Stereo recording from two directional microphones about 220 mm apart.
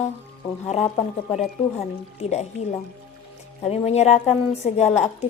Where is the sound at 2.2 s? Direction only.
30° left (ahead or behind).